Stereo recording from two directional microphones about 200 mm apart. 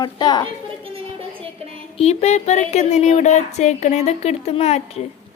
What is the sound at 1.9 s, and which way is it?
Speech, 30° left (ahead or behind).